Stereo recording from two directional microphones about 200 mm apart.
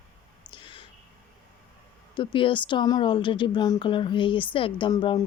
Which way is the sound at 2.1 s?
25° left (ahead or behind).